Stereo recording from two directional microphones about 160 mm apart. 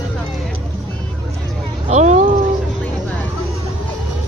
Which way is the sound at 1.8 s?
45° right (ahead or behind).